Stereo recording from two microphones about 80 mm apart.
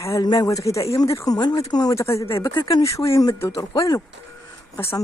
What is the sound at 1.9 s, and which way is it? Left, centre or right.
Speech, left.